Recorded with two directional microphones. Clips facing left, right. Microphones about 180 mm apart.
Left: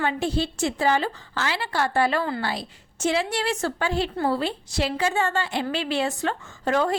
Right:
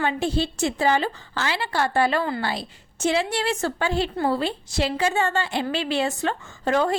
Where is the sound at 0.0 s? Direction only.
25° right (ahead or behind).